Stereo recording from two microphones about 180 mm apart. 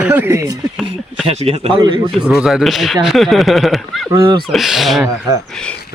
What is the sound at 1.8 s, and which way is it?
Speech, 20° right (ahead or behind).